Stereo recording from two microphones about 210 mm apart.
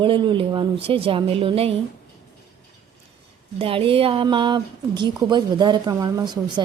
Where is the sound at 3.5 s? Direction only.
25° right (ahead or behind).